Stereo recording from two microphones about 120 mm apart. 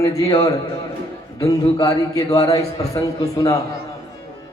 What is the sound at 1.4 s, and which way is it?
Speech, 30° left (ahead or behind).